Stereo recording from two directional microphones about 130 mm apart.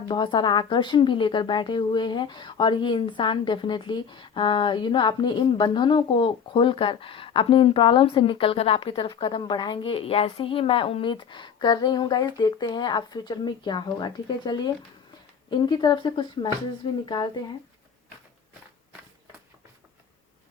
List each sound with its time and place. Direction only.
0.1 s a woman's voice: 35° left (ahead or behind)